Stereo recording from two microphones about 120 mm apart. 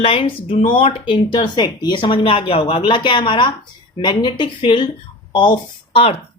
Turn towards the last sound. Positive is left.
turn(degrees=50)  # may be behind; listen again after turning